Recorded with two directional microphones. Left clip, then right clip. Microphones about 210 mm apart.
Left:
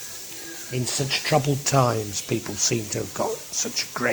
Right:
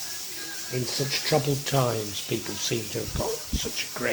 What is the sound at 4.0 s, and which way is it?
Speech, 20° left (ahead or behind).